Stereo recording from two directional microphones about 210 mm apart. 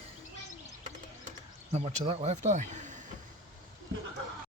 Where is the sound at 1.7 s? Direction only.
30° right (ahead or behind).